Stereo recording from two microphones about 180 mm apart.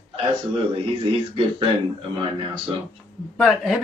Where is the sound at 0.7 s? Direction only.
30° right (ahead or behind).